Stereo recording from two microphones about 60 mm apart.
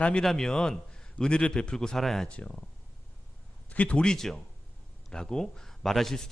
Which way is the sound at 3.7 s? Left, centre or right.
Left.